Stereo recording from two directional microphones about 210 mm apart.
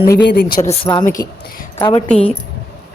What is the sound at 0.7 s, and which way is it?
Speech, 25° left (ahead or behind).